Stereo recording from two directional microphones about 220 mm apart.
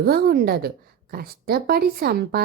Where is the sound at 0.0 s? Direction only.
45° right (ahead or behind).